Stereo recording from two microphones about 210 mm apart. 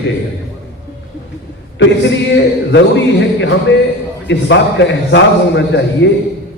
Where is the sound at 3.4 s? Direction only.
60° left (ahead or behind).